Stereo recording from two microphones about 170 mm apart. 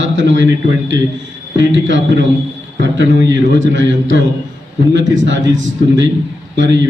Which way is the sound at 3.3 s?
90° right.